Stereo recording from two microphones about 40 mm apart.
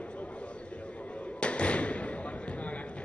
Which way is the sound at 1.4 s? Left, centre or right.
Left.